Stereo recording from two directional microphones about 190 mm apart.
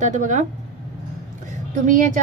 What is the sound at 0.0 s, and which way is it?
Speech, 40° right (ahead or behind).